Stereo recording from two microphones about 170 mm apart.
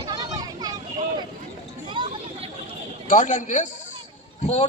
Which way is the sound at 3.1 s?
45° left (ahead or behind).